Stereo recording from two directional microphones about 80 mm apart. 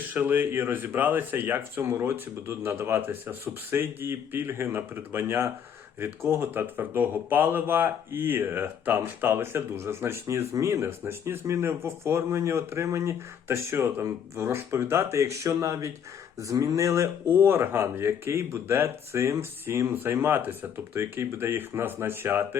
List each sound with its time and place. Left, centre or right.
0.1 s speech: right